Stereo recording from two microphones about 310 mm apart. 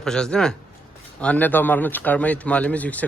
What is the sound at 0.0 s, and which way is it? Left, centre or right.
A man's voice, centre.